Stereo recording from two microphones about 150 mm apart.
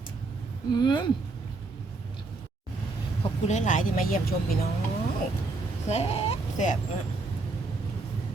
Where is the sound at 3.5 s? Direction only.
55° left (ahead or behind); by 4.6 s 75° left (ahead or behind).